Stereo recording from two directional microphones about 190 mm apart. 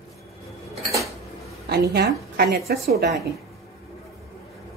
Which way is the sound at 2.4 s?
55° right (ahead or behind).